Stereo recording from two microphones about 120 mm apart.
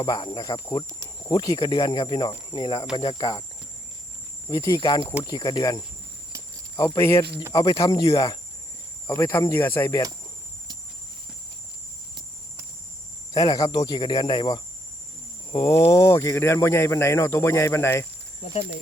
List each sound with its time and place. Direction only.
0.0 s speech: 35° left (ahead or behind)
4.4 s speech: 30° left (ahead or behind)
7.5 s speech: 40° left (ahead or behind)
8.1 s speech: 45° left (ahead or behind)
9.0 s speech: 25° left (ahead or behind)
13.3 s speech: 35° left (ahead or behind)
15.6 s speech: 30° left (ahead or behind)